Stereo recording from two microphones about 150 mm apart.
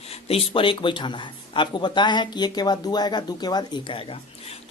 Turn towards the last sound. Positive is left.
turn(degrees=35)  # may be behind; listen again after turning